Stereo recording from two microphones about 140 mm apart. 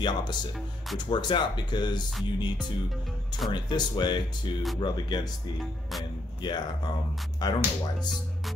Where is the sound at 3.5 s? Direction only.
30° left (ahead or behind).